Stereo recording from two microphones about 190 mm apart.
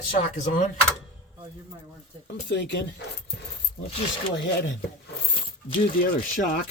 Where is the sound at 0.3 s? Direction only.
40° left (ahead or behind).